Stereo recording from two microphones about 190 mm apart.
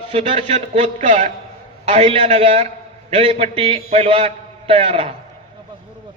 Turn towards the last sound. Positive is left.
turn(degrees=-30)  # may be behind; listen again after turning